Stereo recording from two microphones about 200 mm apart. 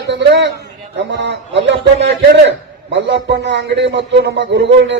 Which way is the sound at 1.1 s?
60° right (ahead or behind).